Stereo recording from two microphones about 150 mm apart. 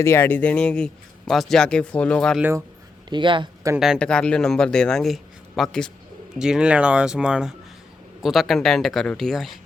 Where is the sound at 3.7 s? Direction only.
5° right (ahead or behind).